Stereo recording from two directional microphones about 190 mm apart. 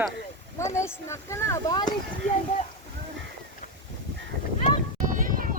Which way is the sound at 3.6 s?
45° left (ahead or behind).